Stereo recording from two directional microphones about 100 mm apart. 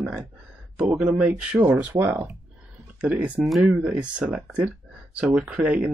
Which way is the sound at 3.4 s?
Centre (ahead or behind).